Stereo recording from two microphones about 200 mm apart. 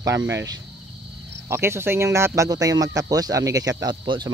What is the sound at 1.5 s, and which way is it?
Speech, 10° right (ahead or behind).